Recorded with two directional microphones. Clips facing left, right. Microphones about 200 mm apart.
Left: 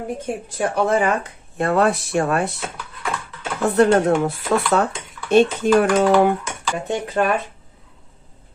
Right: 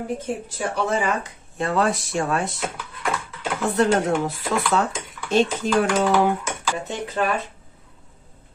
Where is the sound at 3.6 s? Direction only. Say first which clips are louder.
Left 5 dB; 55° left (ahead or behind).